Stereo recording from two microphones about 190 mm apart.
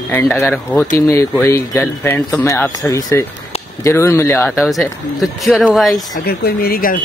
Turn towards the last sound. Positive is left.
turn(degrees=50)  # may be behind; listen again after turning